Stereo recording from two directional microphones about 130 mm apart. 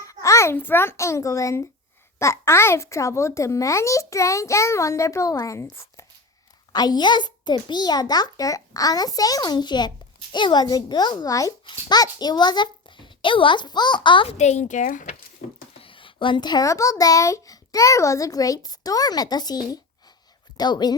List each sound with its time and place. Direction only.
0.0 s a child's voice: 25° left (ahead or behind); by 14.3 s 40° left (ahead or behind)
14.3 s speech: 60° left (ahead or behind); by 15.1 s 75° left (ahead or behind)
15.8 s a child's voice: 40° left (ahead or behind)